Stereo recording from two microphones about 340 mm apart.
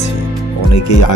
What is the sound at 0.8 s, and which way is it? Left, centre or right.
Speech, left.